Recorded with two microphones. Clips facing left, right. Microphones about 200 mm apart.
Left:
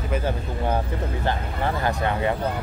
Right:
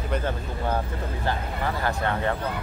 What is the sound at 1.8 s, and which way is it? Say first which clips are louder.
Speech: left 2 dB; 15° left (ahead or behind).